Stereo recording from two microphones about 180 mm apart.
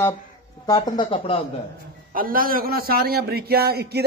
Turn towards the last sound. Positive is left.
turn(degrees=-60)  # may be behind; listen again after turning